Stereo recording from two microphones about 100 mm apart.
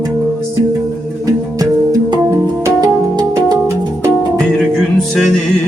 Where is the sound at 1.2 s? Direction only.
35° right (ahead or behind).